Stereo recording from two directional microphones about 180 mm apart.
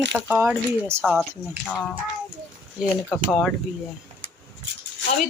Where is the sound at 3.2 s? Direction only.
Centre (ahead or behind).